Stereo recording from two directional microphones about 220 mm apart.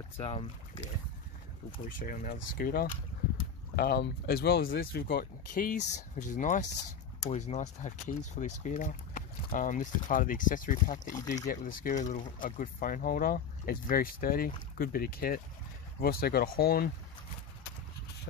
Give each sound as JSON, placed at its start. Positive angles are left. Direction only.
{"t": 0.2, "sound": "speech", "side_deg": 25}
{"t": 1.9, "sound": "speech", "side_deg": 40}
{"t": 5.9, "sound": "speech", "side_deg": 90}
{"t": 6.3, "sound": "speech", "side_deg": 35}
{"t": 11.1, "sound": "speech", "side_deg": 15}
{"t": 11.4, "sound": "speech", "side_deg": 35}